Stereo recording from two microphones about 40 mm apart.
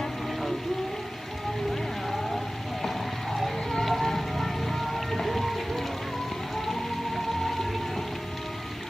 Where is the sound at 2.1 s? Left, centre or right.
Centre.